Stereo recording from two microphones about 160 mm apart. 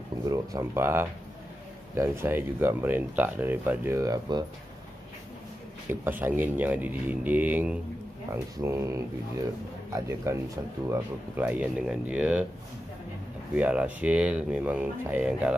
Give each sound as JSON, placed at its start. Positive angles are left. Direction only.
{"t": 0.2, "sound": "speech", "side_deg": -20}
{"t": 5.9, "sound": "speech", "side_deg": -10}
{"t": 13.6, "sound": "speech", "side_deg": -10}